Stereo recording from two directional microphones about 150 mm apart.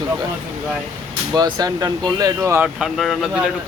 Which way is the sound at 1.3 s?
25° right (ahead or behind).